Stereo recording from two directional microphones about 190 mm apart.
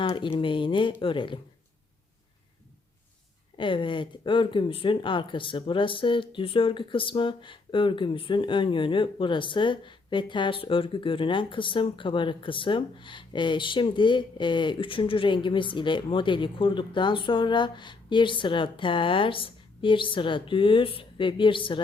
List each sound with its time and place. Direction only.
0.0 s speech: 25° left (ahead or behind)
3.6 s speech: 25° left (ahead or behind)